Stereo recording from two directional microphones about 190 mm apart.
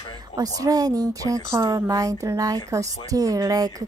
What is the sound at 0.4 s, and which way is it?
Speech, 20° right (ahead or behind).